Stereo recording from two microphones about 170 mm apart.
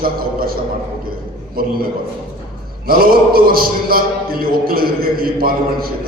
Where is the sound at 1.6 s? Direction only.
60° right (ahead or behind).